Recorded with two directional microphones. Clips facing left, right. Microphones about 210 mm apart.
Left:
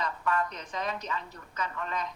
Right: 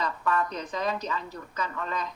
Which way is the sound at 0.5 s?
35° right (ahead or behind).